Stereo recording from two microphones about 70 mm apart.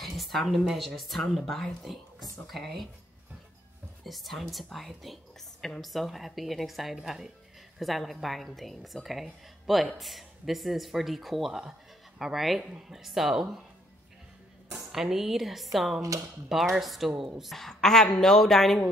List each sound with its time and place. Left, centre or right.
0.0 s a woman's voice: centre
4.0 s a woman's voice: centre
14.9 s a woman's voice: centre
16.0 s speech: right
16.4 s a woman's voice: centre